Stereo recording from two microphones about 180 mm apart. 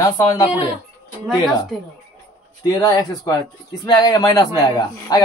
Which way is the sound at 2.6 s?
20° left (ahead or behind).